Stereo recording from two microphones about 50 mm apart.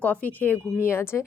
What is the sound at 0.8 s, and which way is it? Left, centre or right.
Speech, left.